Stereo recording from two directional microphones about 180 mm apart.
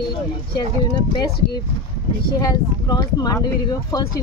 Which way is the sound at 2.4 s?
20° left (ahead or behind).